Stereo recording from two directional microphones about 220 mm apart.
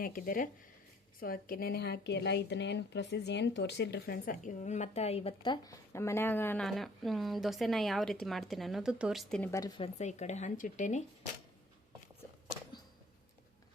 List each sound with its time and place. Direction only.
0.0 s speech: 40° left (ahead or behind)